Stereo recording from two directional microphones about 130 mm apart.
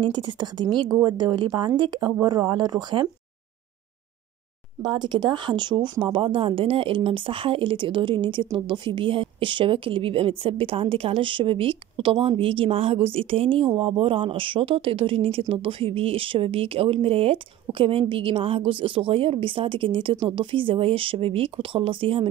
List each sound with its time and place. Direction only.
0.0 s a woman's voice: 35° right (ahead or behind)
4.8 s speech: 35° right (ahead or behind)